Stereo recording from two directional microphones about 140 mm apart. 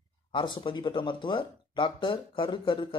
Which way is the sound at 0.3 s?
35° left (ahead or behind).